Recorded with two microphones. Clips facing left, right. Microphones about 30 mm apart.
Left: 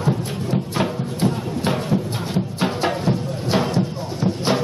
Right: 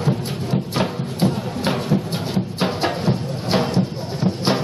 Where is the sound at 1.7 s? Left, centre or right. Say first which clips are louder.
Right 1 dB; centre.